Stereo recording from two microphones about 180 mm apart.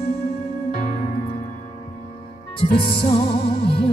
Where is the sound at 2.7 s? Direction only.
60° left (ahead or behind).